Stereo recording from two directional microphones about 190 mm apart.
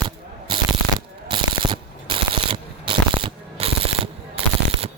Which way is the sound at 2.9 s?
25° right (ahead or behind).